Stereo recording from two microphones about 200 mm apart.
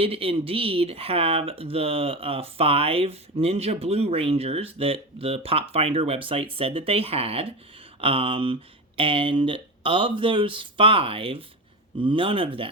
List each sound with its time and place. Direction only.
0.0 s speech: 30° right (ahead or behind)